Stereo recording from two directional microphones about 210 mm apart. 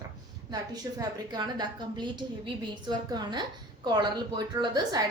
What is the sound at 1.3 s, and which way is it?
A woman's voice, 20° right (ahead or behind).